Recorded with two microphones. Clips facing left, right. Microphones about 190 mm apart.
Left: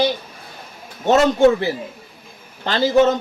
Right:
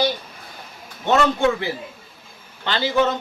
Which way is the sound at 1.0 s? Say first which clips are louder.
Left 5 dB; 40° left (ahead or behind).